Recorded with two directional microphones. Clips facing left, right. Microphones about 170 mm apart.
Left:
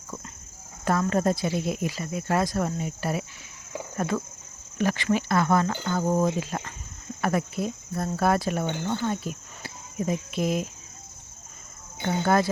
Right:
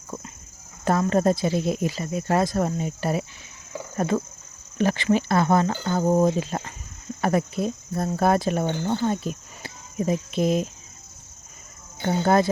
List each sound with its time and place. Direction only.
0.9 s speech: 25° right (ahead or behind)
3.9 s cricket: 25° right (ahead or behind)
4.8 s speech: 25° right (ahead or behind)
12.2 s speech: 20° right (ahead or behind)